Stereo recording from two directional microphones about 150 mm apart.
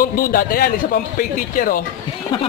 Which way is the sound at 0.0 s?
70° left (ahead or behind).